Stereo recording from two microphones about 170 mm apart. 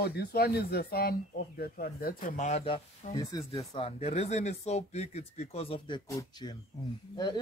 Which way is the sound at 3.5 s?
35° left (ahead or behind).